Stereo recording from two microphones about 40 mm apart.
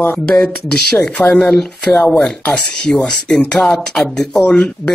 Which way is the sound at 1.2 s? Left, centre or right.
Left.